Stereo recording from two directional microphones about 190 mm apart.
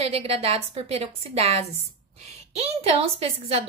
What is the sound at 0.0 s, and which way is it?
A woman's voice, 30° right (ahead or behind).